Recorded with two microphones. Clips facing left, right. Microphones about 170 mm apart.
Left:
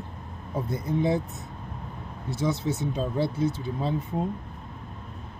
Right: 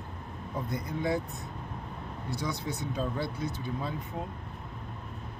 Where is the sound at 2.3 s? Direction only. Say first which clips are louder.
Left 7 dB; 25° left (ahead or behind).